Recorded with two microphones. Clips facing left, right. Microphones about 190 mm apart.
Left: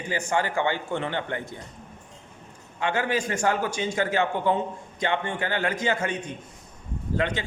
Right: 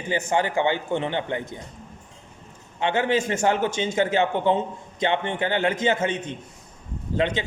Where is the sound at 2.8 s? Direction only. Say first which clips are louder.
Right 3 dB; 25° right (ahead or behind).